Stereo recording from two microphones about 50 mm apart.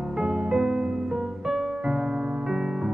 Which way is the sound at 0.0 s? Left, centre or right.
Centre.